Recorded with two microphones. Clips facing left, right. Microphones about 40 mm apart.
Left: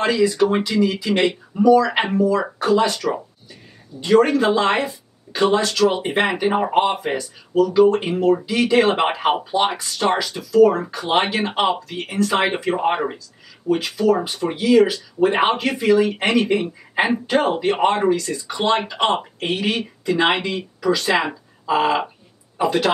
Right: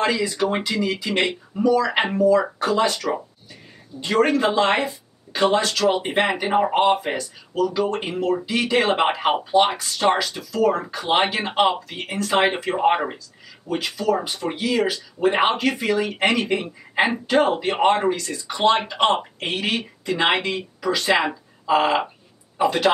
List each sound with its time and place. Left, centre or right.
0.0 s speech: centre
0.5 s speech: centre
5.9 s speech: centre